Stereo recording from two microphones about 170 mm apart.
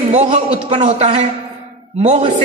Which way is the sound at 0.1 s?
40° right (ahead or behind).